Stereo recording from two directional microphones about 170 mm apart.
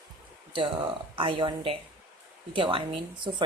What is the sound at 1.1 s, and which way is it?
Speech, 30° right (ahead or behind).